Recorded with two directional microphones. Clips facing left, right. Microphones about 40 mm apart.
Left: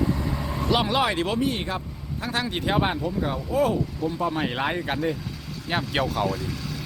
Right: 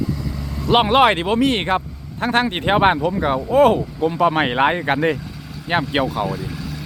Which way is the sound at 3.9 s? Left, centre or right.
Right.